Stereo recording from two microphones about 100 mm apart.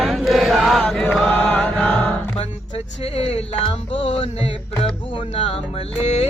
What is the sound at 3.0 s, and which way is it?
Speech, 85° left.